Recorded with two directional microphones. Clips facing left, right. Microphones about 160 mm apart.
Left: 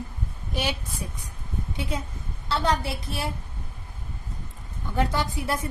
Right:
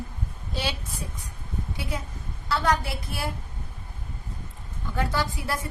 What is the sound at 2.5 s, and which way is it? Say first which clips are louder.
Speech: even; 25° left (ahead or behind).